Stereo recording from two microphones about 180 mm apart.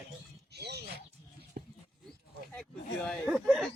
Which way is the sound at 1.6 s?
55° right (ahead or behind).